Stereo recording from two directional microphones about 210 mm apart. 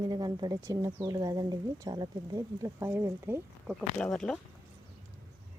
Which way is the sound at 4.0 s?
5° left (ahead or behind).